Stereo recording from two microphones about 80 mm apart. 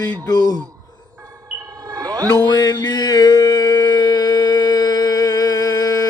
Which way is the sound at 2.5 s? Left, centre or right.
Left.